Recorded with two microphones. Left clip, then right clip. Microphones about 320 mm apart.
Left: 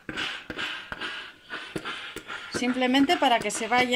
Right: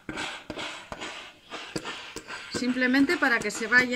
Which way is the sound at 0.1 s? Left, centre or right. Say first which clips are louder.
Left 2 dB; centre.